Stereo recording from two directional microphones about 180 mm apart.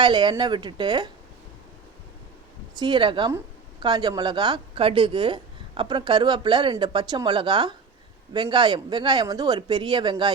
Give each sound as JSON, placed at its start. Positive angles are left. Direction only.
{"t": 0.0, "sound": "a woman's voice", "side_deg": -25}
{"t": 2.7, "sound": "a woman's voice", "side_deg": -25}